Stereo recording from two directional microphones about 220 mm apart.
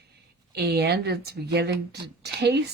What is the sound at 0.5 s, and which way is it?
Speech, 45° right (ahead or behind).